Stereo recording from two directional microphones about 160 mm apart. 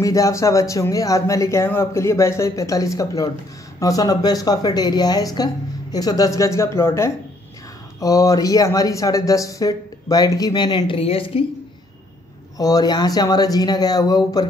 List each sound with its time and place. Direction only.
0.0 s speech: 20° left (ahead or behind); by 11.4 s 35° left (ahead or behind)
12.5 s speech: 25° left (ahead or behind)